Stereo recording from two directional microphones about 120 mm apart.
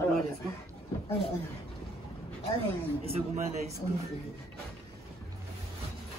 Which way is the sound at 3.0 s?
60° right (ahead or behind).